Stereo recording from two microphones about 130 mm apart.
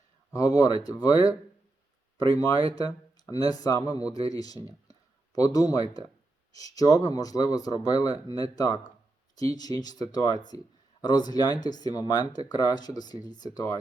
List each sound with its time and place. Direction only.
0.3 s speech: 25° left (ahead or behind)
4.9 s a sound: 30° left (ahead or behind)
6.5 s speech: 30° left (ahead or behind)